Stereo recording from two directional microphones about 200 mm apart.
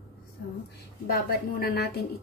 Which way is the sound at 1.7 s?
55° left (ahead or behind).